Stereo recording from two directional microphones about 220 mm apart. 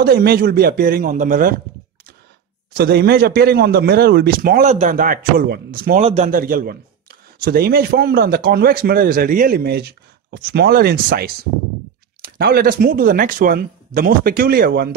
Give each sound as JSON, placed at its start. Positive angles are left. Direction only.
{"t": 0.0, "sound": "a man's voice", "side_deg": -45}
{"t": 2.7, "sound": "a man's voice", "side_deg": -45}
{"t": 5.9, "sound": "a man's voice", "side_deg": -30}